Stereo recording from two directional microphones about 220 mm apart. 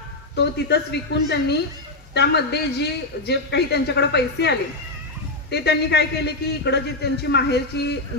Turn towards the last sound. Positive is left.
turn(degrees=50)  # may be behind; listen again after turning